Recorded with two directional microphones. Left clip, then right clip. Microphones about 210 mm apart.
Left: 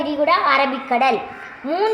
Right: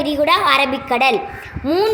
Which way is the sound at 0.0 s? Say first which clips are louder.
Right 2 dB; 45° right (ahead or behind).